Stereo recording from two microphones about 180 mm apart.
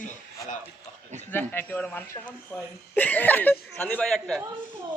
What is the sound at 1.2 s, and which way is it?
Speech, 10° left (ahead or behind).